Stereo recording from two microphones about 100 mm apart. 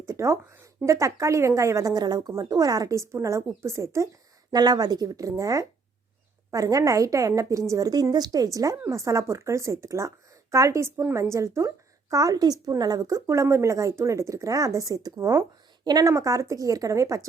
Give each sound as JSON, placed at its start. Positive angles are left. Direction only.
{"t": 0.0, "sound": "a sound", "side_deg": -30}
{"t": 0.9, "sound": "speech", "side_deg": -30}
{"t": 4.5, "sound": "a woman's voice", "side_deg": -40}